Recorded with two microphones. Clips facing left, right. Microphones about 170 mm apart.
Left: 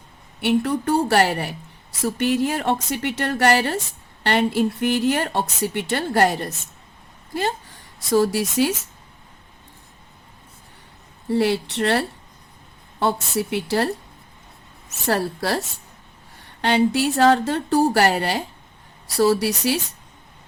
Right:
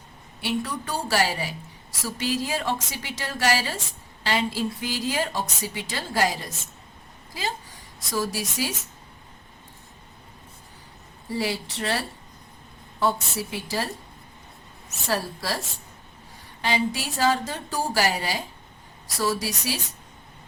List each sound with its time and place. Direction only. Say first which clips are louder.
0.3 s speech: left 8 dB; 60° left (ahead or behind)
8.1 s speech: left 10 dB; 65° left (ahead or behind)
11.3 s speech: left 8 dB; 65° left (ahead or behind)
15.0 s speech: left 6 dB; 65° left (ahead or behind)